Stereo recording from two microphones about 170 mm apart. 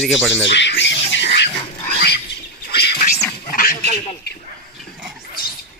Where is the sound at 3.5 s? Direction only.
55° left (ahead or behind).